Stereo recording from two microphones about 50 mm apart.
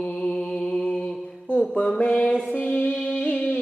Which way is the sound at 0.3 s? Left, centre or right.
Centre.